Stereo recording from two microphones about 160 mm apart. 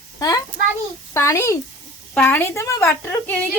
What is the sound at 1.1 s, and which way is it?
A woman's voice, 15° left (ahead or behind).